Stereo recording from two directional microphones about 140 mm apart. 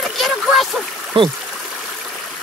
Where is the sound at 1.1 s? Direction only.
40° right (ahead or behind).